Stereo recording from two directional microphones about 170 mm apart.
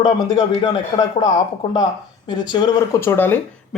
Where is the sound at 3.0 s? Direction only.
15° left (ahead or behind).